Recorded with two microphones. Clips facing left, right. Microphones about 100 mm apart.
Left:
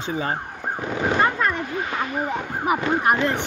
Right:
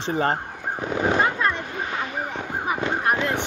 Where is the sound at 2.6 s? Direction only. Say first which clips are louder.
Left 4 dB; 10° left (ahead or behind).